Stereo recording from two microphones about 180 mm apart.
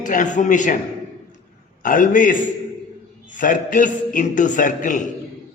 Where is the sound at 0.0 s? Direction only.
45° left (ahead or behind).